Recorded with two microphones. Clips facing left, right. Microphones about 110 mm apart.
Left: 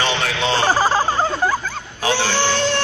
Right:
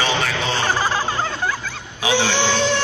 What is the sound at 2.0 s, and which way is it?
Speech, 15° right (ahead or behind).